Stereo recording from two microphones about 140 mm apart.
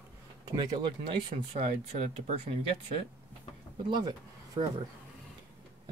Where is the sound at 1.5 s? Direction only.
50° right (ahead or behind).